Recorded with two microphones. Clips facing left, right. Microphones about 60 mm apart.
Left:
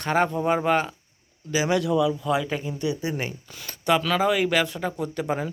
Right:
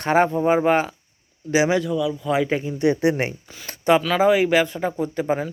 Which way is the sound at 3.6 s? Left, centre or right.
Right.